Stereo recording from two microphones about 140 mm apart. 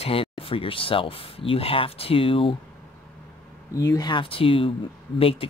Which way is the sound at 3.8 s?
25° left (ahead or behind).